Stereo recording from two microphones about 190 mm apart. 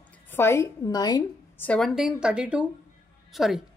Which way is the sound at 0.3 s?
10° left (ahead or behind).